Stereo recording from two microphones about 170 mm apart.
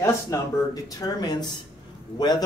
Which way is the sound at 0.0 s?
20° left (ahead or behind).